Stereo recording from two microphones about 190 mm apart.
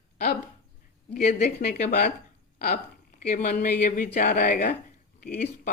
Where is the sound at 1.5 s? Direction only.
55° left (ahead or behind).